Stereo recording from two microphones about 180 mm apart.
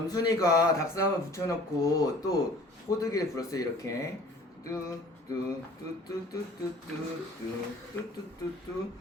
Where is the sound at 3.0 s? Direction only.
15° left (ahead or behind).